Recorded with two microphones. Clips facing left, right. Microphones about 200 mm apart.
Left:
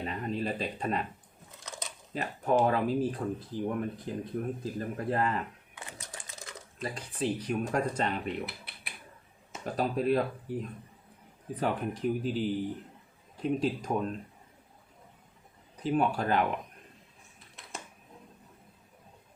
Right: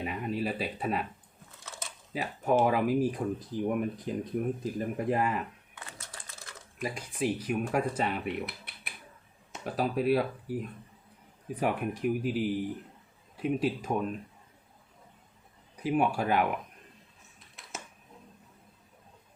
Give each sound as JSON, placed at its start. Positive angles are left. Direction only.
{"t": 0.0, "sound": "a sound", "side_deg": -10}
{"t": 1.5, "sound": "a sound", "side_deg": 15}
{"t": 2.1, "sound": "speech", "side_deg": -5}
{"t": 5.8, "sound": "typing", "side_deg": 15}
{"t": 6.7, "sound": "speech", "side_deg": -10}
{"t": 15.8, "sound": "speech", "side_deg": -10}